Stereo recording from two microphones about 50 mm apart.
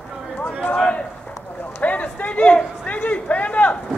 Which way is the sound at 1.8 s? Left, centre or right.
Left.